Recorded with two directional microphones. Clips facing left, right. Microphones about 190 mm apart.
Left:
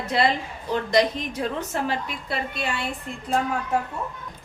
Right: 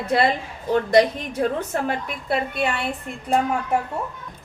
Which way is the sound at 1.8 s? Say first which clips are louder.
Right 3 dB; 55° right (ahead or behind).